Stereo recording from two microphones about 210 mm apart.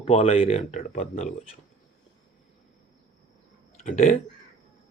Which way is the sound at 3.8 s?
35° left (ahead or behind).